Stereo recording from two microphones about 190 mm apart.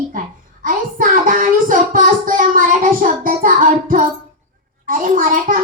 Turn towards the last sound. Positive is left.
turn(degrees=-45)  # may be behind; listen again after turning